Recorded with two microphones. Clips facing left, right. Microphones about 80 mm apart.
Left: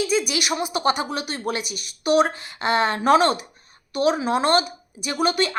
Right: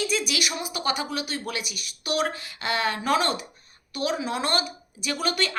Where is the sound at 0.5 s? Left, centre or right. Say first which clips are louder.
Left 6 dB; left.